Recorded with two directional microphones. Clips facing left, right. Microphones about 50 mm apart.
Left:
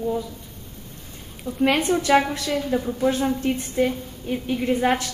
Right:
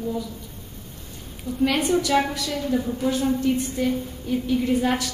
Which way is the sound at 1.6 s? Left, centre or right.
Left.